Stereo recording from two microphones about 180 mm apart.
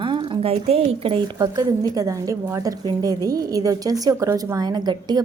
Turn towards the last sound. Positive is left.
turn(degrees=-25)  # may be behind; listen again after turning